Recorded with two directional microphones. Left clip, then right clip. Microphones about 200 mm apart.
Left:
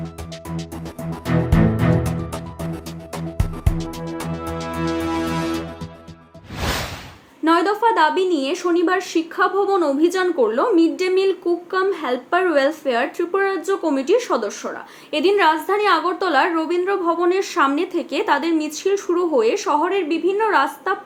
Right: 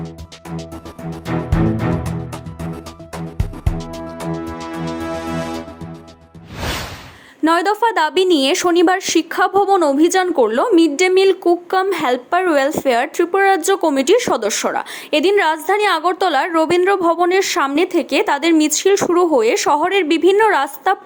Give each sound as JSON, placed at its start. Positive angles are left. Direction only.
{"t": 1.1, "sound": "music", "side_deg": 0}
{"t": 7.4, "sound": "a woman's voice", "side_deg": -40}
{"t": 15.1, "sound": "a woman's voice", "side_deg": -35}